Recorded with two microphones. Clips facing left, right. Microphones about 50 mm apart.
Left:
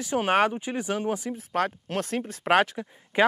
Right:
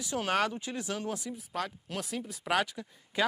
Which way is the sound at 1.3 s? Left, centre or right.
Left.